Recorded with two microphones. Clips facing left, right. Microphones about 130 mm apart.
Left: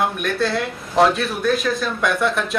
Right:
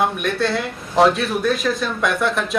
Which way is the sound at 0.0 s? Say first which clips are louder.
Right 1 dB; centre (ahead or behind).